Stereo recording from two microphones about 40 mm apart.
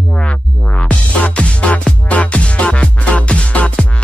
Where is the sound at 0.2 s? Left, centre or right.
Left.